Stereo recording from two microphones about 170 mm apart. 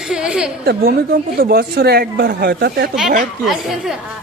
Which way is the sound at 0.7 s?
65° right (ahead or behind).